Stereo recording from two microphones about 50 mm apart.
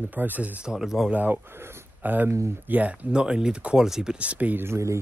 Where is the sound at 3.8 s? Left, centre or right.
Centre.